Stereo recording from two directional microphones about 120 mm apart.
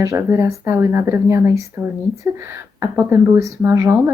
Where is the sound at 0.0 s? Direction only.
25° right (ahead or behind).